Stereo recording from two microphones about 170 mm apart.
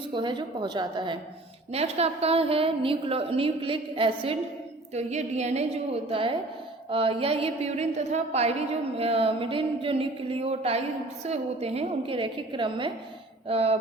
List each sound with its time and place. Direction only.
0.1 s a woman's voice: 25° right (ahead or behind)
1.7 s a woman's voice: 35° right (ahead or behind)